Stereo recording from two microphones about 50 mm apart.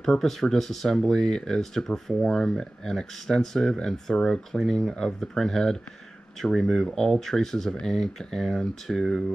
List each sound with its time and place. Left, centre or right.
0.0 s speech: centre